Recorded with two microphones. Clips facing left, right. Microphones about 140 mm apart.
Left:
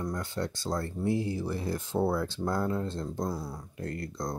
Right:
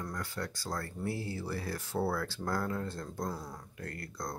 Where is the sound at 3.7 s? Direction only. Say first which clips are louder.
Left 7 dB; 25° left (ahead or behind).